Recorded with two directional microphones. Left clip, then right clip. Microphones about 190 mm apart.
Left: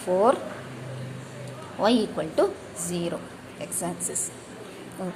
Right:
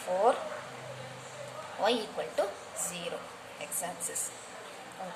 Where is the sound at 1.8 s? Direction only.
20° left (ahead or behind).